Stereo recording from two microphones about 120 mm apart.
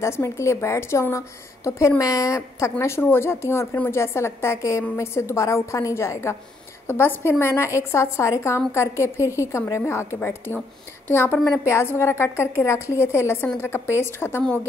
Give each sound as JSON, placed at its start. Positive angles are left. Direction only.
{"t": 0.0, "sound": "a woman's voice", "side_deg": 25}